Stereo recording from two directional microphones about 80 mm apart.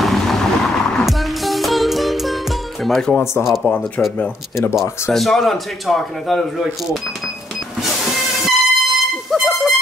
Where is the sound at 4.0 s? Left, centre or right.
Centre.